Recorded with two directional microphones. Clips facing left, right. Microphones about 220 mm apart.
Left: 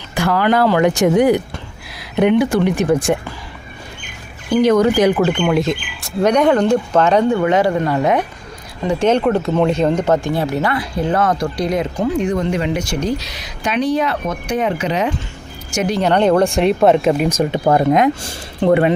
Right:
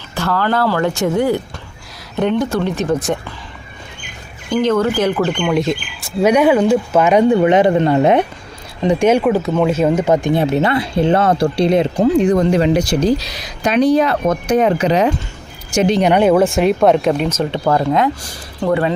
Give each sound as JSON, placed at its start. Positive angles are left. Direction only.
{"t": 0.1, "sound": "speech", "side_deg": 15}
{"t": 4.4, "sound": "speech", "side_deg": 10}
{"t": 8.8, "sound": "speech", "side_deg": -15}
{"t": 16.0, "sound": "speech", "side_deg": -10}